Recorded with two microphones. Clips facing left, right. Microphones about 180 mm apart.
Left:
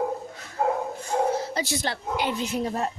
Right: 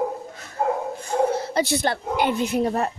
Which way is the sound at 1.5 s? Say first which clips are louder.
Right 6 dB; 60° right (ahead or behind).